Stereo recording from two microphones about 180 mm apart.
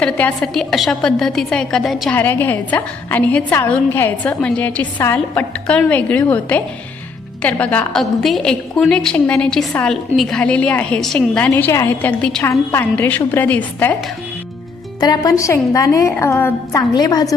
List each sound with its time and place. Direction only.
0.0 s a woman's voice: 5° left (ahead or behind)
15.0 s a woman's voice: 20° left (ahead or behind)